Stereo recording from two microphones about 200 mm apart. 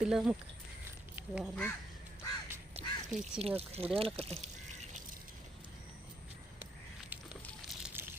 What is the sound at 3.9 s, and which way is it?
Speech, 30° right (ahead or behind).